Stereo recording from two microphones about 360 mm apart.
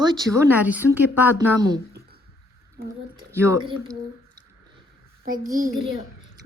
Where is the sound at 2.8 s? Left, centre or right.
Right.